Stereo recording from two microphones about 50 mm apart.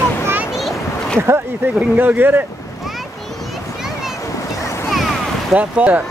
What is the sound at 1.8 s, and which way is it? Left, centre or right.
Speech, right.